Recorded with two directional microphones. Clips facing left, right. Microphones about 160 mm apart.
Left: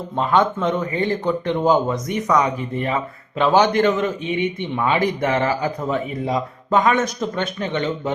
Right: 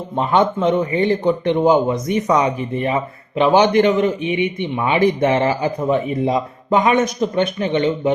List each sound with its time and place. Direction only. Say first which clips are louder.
0.2 s speech: right 2 dB; 20° right (ahead or behind)